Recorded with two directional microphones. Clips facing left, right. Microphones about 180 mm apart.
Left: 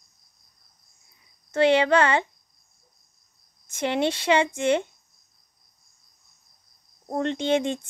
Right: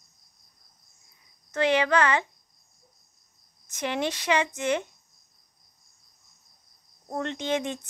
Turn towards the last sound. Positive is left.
turn(degrees=30)  # may be behind; listen again after turning